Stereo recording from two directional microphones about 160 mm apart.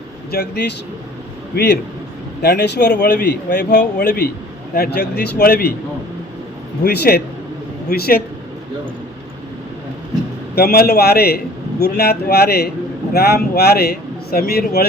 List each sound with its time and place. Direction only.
0.3 s a man's voice: 85° left
6.8 s a man's voice: 80° left
10.5 s a man's voice: 80° left